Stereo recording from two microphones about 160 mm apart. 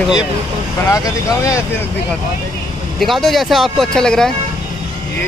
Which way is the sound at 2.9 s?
Centre (ahead or behind).